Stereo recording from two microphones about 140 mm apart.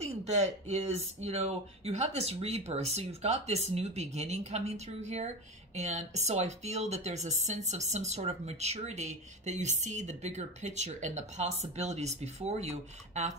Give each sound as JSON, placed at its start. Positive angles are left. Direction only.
{"t": 0.0, "sound": "speech", "side_deg": -55}